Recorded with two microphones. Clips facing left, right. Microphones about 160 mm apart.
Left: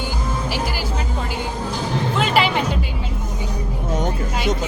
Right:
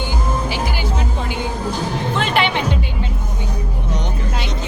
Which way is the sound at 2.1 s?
5° left (ahead or behind).